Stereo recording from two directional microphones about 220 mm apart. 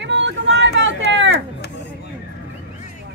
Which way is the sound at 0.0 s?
55° right (ahead or behind).